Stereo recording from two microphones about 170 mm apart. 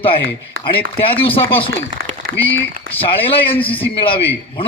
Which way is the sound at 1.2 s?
30° left (ahead or behind).